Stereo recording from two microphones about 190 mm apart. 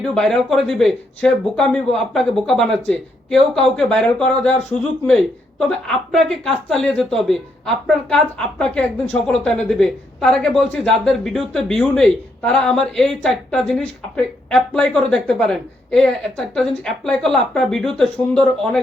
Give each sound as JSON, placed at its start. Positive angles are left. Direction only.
{"t": 0.1, "sound": "speech", "side_deg": 5}